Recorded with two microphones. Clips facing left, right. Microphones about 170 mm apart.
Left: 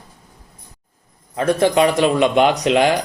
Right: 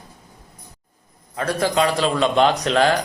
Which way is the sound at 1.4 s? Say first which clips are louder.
Left 5 dB; 20° left (ahead or behind).